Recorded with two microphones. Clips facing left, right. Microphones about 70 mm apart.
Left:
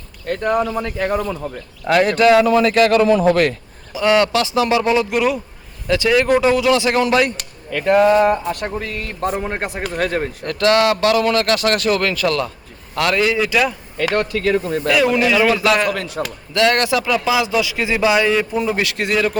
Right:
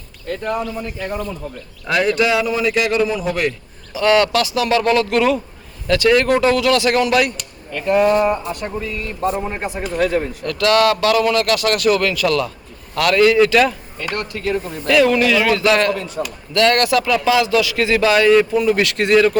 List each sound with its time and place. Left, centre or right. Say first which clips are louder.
0.3 s speech: left 4 dB; left
2.1 s a man's voice: left 5 dB; left
3.9 s speech: even; centre
7.3 s speech: left 3 dB; left
10.4 s speech: even; left
13.0 s speech: right 4 dB; left
14.0 s speech: left 6 dB; left
15.0 s speech: even; centre
15.9 s speech: even; left
16.6 s speech: right 1 dB; left
17.1 s speech: right 2 dB; centre